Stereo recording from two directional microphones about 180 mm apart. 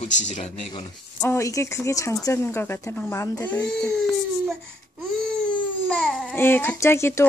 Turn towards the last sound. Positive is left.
turn(degrees=15)  # may be behind; listen again after turning